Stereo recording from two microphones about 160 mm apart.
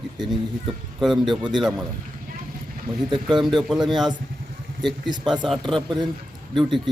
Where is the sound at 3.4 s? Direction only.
Centre (ahead or behind).